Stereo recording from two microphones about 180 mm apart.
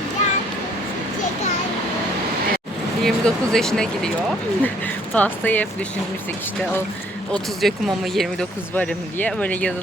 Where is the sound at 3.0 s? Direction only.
5° left (ahead or behind).